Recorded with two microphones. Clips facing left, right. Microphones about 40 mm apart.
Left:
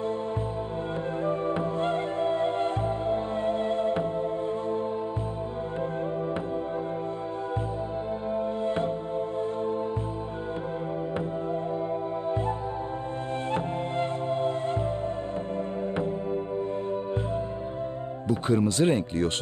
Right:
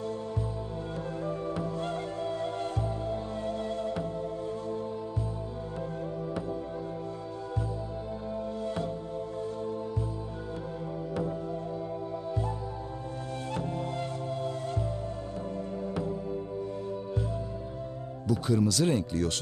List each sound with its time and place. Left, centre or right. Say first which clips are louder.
1.2 s music: left 6 dB; left
8.4 s music: left 6 dB; left
13.5 s music: left 3 dB; left
18.3 s speech: left 2 dB; left